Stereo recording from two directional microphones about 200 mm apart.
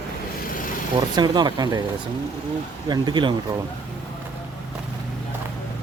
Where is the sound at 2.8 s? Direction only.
20° right (ahead or behind).